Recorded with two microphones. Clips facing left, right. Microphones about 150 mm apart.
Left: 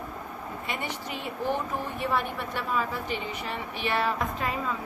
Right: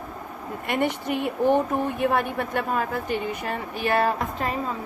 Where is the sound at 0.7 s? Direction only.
55° right (ahead or behind).